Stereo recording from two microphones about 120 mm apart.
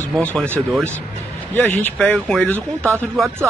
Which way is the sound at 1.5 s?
15° left (ahead or behind).